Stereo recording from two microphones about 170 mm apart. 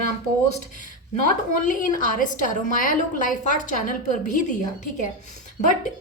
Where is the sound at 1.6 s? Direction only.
50° left (ahead or behind).